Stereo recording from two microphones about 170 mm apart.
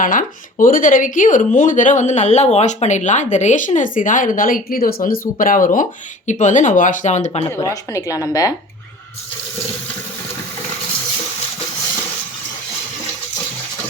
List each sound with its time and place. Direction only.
0.0 s speech: 50° left (ahead or behind)
7.5 s a woman's voice: 20° left (ahead or behind)